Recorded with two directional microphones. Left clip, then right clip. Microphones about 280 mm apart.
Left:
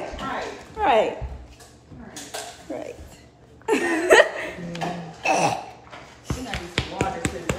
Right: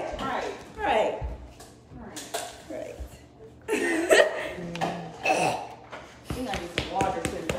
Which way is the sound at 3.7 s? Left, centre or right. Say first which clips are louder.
Left 5 dB; centre.